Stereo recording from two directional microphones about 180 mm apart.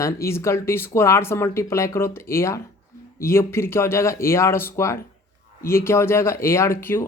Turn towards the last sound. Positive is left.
turn(degrees=15)  # may be behind; listen again after turning